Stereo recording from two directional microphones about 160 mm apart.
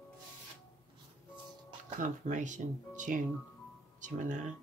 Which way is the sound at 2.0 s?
50° right (ahead or behind).